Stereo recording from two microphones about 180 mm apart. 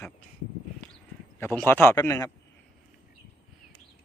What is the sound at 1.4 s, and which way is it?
Speech, 10° left (ahead or behind).